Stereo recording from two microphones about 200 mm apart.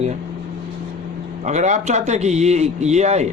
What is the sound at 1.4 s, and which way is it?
A man's voice, 35° right (ahead or behind).